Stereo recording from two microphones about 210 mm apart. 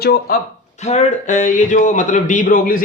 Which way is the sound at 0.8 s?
30° left (ahead or behind).